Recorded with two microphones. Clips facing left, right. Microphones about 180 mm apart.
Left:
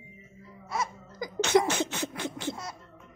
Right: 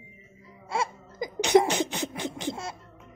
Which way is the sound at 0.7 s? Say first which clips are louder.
Right 3 dB; 30° right (ahead or behind).